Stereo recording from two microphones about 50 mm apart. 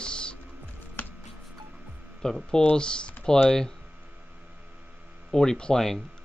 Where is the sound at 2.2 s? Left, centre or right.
Centre.